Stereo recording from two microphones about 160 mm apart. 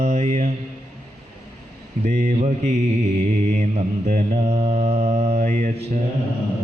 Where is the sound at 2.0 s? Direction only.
50° right (ahead or behind).